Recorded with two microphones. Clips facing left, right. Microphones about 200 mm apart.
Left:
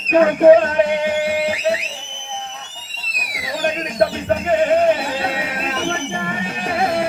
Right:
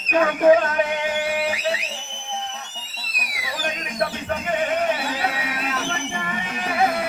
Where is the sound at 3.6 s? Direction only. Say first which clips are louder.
Left 8 dB; 30° left (ahead or behind).